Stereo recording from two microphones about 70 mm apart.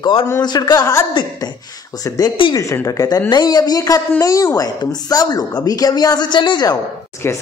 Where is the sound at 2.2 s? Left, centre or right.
Left.